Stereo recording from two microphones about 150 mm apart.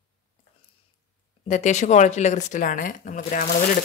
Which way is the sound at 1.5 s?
50° left (ahead or behind).